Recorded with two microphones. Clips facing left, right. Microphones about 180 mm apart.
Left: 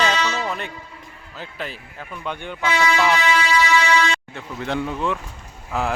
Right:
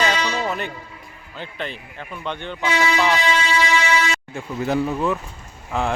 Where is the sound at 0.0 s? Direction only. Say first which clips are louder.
Even; 10° right (ahead or behind).